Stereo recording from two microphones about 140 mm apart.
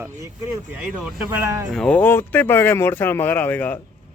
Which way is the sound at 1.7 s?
10° left (ahead or behind).